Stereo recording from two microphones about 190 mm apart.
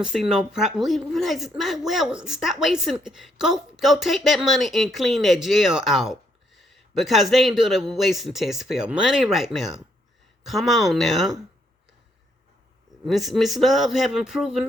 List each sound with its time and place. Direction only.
0.0 s a woman's voice: 5° right (ahead or behind)
13.1 s a woman's voice: centre (ahead or behind)